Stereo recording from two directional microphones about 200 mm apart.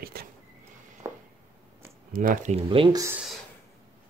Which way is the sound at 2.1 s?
45° right (ahead or behind).